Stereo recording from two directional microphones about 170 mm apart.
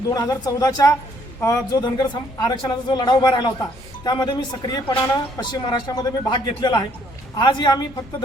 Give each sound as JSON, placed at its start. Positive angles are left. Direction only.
{"t": 0.1, "sound": "speech", "side_deg": 20}